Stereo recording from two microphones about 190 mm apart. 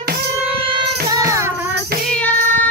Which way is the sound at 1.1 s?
15° right (ahead or behind).